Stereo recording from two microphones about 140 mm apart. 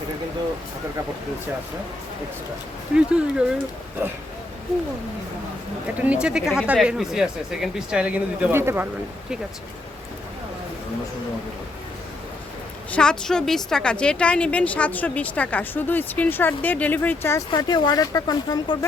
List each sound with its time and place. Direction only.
2.9 s speech: 5° right (ahead or behind)
6.1 s speech: 5° right (ahead or behind)
12.9 s a woman's voice: 5° left (ahead or behind)
17.5 s speech: 30° left (ahead or behind)